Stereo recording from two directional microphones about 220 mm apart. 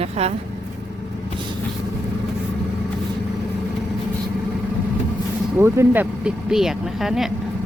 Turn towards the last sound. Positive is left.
turn(degrees=0)  # may be behind; listen again after turning